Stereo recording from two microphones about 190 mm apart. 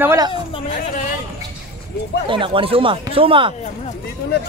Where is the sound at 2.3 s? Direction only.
25° right (ahead or behind).